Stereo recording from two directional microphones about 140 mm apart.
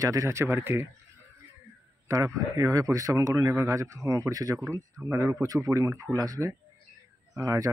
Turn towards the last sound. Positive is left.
turn(degrees=-25)  # may be behind; listen again after turning